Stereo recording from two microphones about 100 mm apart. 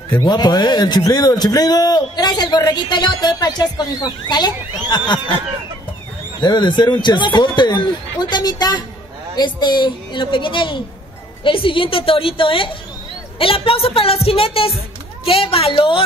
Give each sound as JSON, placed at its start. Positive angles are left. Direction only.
{"t": 0.2, "sound": "a man's voice", "side_deg": 40}
{"t": 6.4, "sound": "a man's voice", "side_deg": 45}